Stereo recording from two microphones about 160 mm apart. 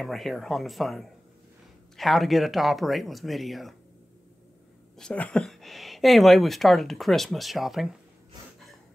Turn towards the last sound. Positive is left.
turn(degrees=0)  # may be behind; listen again after turning